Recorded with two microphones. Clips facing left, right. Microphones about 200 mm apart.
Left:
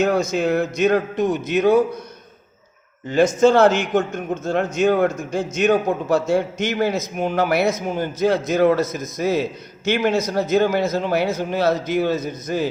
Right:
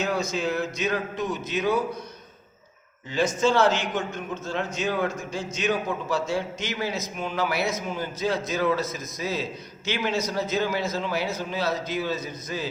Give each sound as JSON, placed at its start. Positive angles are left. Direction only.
{"t": 0.0, "sound": "a man's voice", "side_deg": 50}
{"t": 3.4, "sound": "a man's voice", "side_deg": 50}